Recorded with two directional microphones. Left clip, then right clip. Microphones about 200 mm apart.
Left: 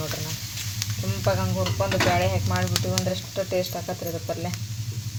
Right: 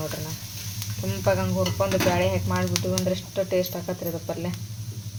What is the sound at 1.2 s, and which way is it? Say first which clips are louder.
Speech: right 2 dB; 5° left (ahead or behind).